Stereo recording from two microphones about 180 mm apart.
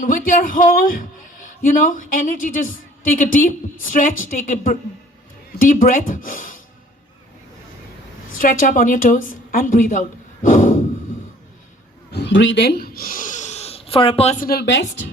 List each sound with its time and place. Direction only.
0.0 s a man's voice: 50° left (ahead or behind)
8.4 s speech: 50° left (ahead or behind)
12.1 s a sound: 80° left; by 14.4 s 35° left (ahead or behind)
14.4 s a woman's voice: 65° left (ahead or behind); by 14.8 s 80° left